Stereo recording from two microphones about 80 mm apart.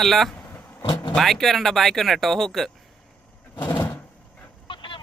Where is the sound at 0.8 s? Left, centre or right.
Left.